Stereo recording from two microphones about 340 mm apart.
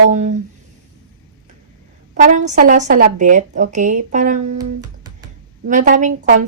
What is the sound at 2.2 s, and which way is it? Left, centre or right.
Speech, right.